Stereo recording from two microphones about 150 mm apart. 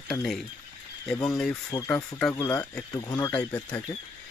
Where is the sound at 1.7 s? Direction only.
25° left (ahead or behind).